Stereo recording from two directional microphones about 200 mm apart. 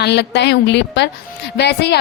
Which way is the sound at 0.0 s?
55° left (ahead or behind).